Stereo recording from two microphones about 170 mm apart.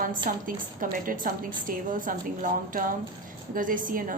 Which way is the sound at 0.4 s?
55° right (ahead or behind).